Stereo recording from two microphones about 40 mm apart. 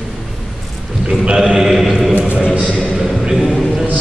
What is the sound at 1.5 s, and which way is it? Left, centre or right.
Chant, centre.